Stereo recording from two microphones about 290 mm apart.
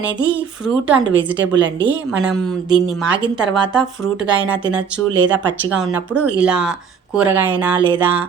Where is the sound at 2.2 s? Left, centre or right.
Centre.